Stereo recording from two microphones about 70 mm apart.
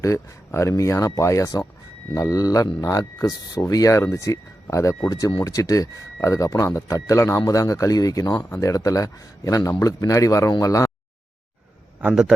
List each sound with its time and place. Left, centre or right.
0.0 s speech: left
3.9 s speech: left
8.4 s speech: left
8.6 s speech: left